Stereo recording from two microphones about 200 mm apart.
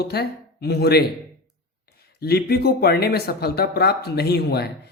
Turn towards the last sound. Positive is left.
turn(degrees=55)  # may be behind; listen again after turning